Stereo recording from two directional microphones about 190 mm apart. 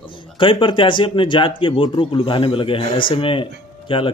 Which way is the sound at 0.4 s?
25° left (ahead or behind).